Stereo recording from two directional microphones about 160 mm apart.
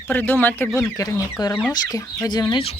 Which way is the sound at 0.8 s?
20° left (ahead or behind).